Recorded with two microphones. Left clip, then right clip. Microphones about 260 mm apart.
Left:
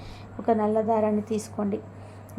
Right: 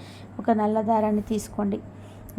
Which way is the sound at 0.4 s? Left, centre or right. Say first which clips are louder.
Even; centre.